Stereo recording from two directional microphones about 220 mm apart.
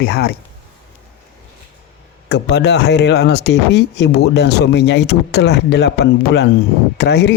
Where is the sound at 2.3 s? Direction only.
50° left (ahead or behind).